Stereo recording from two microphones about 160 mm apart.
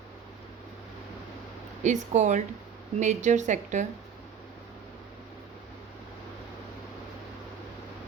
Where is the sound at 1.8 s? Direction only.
50° right (ahead or behind).